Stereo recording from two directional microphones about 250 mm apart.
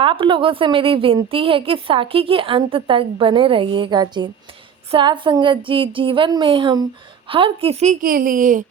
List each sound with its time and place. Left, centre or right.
0.0 s a woman's voice: centre